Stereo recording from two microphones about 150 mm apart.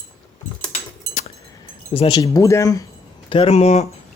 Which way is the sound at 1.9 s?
40° left (ahead or behind).